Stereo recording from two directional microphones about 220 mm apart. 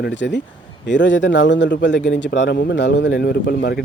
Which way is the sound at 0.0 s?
55° left (ahead or behind).